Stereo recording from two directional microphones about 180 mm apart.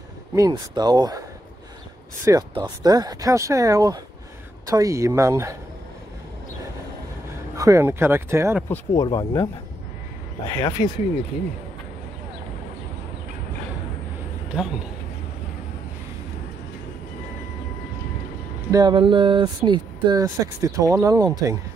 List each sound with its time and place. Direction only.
0.3 s speech: 20° right (ahead or behind)
2.2 s speech: 20° right (ahead or behind)
7.5 s speech: 20° right (ahead or behind)
8.6 s speech: 15° left (ahead or behind)
10.5 s speech: 25° left (ahead or behind)
18.7 s speech: 25° right (ahead or behind)